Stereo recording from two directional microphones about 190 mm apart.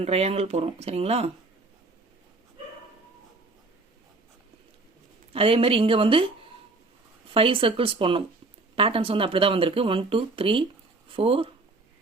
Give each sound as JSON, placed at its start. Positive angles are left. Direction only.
{"t": 0.0, "sound": "speech", "side_deg": -35}
{"t": 5.3, "sound": "speech", "side_deg": -30}